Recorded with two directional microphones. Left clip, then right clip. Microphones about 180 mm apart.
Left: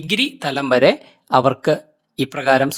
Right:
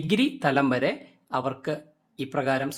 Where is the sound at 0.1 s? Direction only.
50° left (ahead or behind).